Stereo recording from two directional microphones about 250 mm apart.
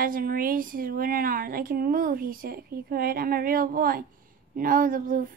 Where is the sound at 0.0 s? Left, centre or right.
Right.